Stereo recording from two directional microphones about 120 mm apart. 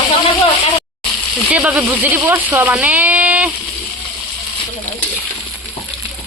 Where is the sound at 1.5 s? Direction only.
10° right (ahead or behind).